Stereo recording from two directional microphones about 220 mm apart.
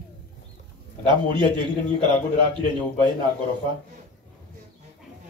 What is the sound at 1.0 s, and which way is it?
Speech, 20° right (ahead or behind).